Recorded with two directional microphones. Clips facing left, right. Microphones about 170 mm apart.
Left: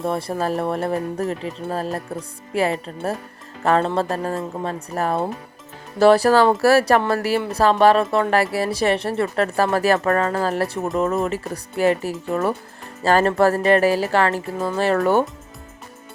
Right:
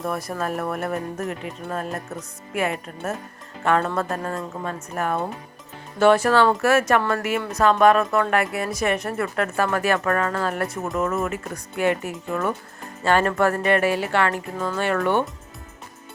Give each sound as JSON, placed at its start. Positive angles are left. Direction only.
{"t": 0.0, "sound": "speech", "side_deg": 30}